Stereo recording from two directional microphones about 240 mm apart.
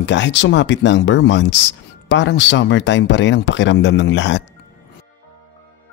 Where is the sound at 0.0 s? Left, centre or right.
Left.